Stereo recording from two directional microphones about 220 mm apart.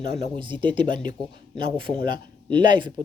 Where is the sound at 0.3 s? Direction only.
20° right (ahead or behind).